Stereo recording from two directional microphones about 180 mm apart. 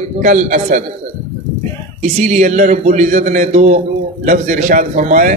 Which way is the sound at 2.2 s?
40° right (ahead or behind).